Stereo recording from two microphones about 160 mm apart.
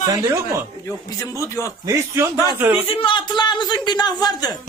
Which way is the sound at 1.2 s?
20° left (ahead or behind).